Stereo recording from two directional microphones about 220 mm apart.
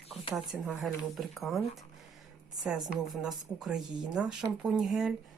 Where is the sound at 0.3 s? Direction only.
Centre (ahead or behind).